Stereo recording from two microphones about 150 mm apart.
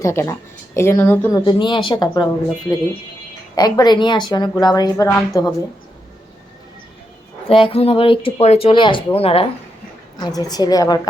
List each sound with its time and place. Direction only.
0.0 s speech: 20° left (ahead or behind)
1.3 s speech: 30° left (ahead or behind)
7.4 s speech: 40° left (ahead or behind)
10.2 s speech: 25° left (ahead or behind)